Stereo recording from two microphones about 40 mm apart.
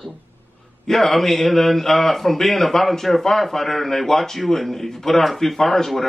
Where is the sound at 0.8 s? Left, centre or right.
Centre.